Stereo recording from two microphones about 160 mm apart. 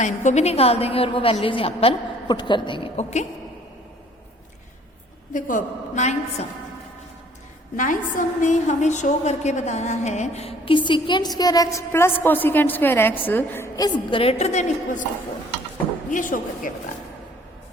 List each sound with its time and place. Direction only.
0.0 s a woman's voice: 50° left (ahead or behind)
5.3 s a woman's voice: 55° left (ahead or behind)
7.8 s a woman's voice: 55° left (ahead or behind)
16.0 s speech: 55° left (ahead or behind)